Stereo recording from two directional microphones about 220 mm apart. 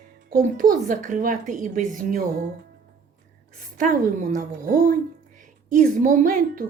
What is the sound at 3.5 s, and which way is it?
A child's voice, 35° right (ahead or behind).